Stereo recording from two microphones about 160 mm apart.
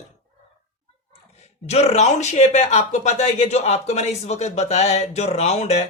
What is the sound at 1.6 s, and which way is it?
Speech, 40° left (ahead or behind).